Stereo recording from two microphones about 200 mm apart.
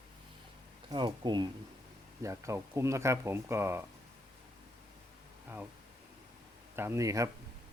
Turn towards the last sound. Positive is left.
turn(degrees=-15)  # may be behind; listen again after turning